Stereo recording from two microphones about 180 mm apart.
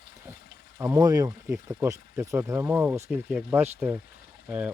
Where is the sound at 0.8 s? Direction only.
20° right (ahead or behind).